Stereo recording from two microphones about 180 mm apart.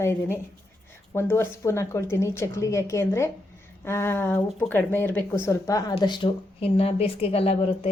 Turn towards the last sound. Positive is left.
turn(degrees=35)  # may be behind; listen again after turning